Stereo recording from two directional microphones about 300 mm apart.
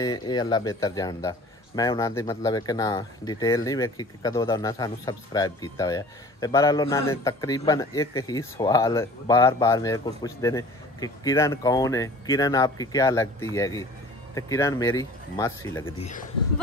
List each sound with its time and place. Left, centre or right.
0.0 s speech: centre
16.0 s speech: left